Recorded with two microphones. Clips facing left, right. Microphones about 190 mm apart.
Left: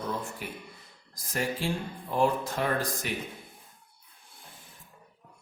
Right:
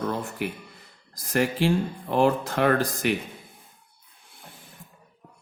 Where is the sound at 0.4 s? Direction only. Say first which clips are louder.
Right 9 dB; 75° right (ahead or behind).